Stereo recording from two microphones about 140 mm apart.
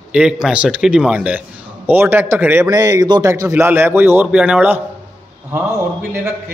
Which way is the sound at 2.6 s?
25° right (ahead or behind).